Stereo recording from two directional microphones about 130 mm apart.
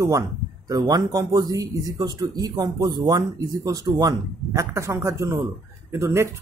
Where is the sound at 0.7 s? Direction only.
30° right (ahead or behind).